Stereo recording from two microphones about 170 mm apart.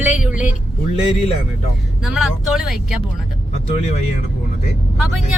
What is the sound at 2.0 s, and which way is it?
Speech, centre (ahead or behind).